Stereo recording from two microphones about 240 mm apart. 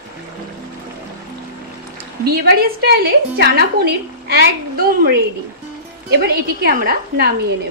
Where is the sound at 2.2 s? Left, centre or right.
Right.